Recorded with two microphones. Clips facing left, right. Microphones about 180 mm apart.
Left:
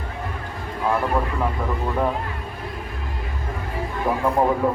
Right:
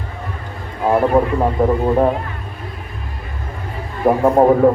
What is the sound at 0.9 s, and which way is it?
Speech, 35° right (ahead or behind).